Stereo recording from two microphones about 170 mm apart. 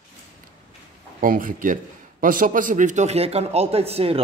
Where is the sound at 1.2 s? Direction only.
55° right (ahead or behind).